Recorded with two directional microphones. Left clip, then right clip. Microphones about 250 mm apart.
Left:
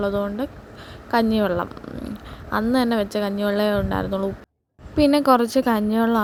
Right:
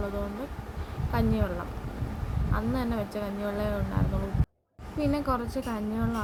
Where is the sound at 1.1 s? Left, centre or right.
Left.